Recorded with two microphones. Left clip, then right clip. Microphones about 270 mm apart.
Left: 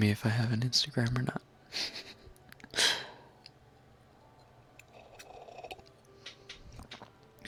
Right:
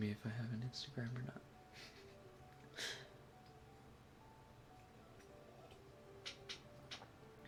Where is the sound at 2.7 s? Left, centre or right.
Left.